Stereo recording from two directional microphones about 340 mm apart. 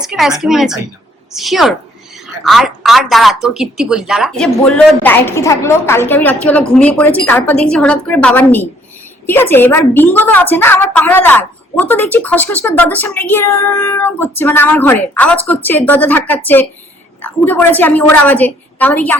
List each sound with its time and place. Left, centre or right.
0.0 s a woman's voice: centre